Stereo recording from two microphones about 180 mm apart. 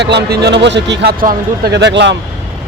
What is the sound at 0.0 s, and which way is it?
A man's voice, 70° right (ahead or behind).